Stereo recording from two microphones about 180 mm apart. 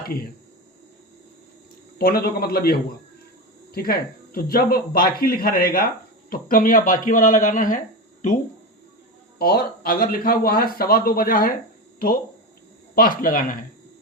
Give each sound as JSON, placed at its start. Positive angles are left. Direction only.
{"t": 2.0, "sound": "speech", "side_deg": 60}
{"t": 3.8, "sound": "speech", "side_deg": 55}
{"t": 9.4, "sound": "speech", "side_deg": 55}